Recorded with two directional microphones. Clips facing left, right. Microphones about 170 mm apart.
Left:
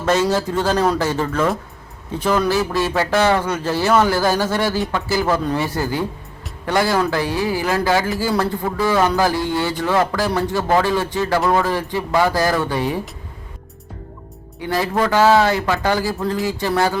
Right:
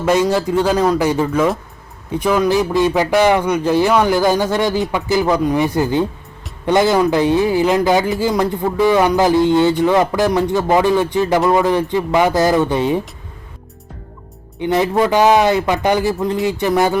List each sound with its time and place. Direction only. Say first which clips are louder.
0.0 s speech: right 3 dB; 15° right (ahead or behind)
14.6 s speech: right 4 dB; 20° right (ahead or behind)